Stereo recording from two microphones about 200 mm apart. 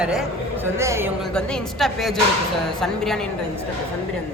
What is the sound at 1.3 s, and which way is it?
Speech, centre (ahead or behind).